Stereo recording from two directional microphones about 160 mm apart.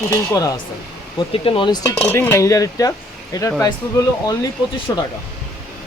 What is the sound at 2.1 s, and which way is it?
Speech, 15° left (ahead or behind).